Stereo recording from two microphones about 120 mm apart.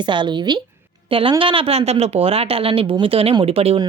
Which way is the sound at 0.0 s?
40° right (ahead or behind).